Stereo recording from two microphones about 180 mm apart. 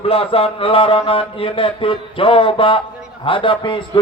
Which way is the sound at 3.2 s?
30° left (ahead or behind).